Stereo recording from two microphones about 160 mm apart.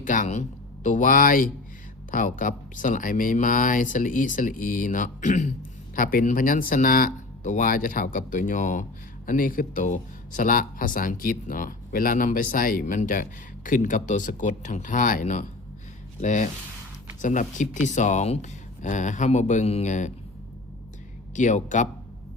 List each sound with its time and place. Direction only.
0.0 s speech: 55° left (ahead or behind)
21.3 s speech: 50° left (ahead or behind)